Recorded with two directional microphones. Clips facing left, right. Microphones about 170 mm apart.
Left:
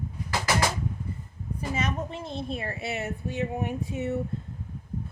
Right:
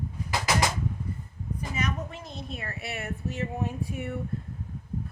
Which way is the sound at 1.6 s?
30° left (ahead or behind).